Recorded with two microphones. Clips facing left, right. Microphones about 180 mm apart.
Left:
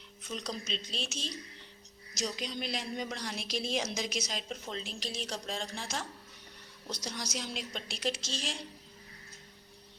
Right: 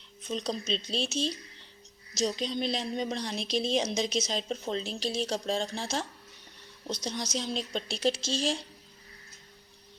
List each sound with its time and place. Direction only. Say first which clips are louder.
0.2 s a woman's voice: right 6 dB; 25° right (ahead or behind)